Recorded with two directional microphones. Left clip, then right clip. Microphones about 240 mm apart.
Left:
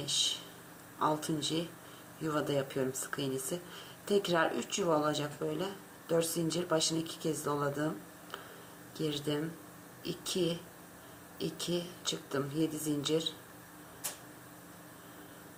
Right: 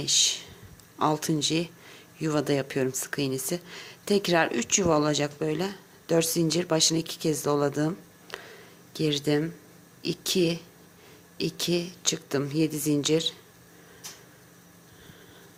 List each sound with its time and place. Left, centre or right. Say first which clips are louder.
0.0 s speech: right 8 dB; right